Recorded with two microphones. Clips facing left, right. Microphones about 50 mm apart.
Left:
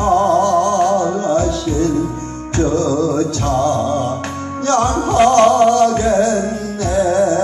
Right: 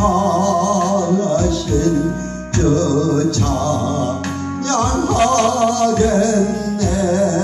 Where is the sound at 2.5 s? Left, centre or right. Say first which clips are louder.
Even; left.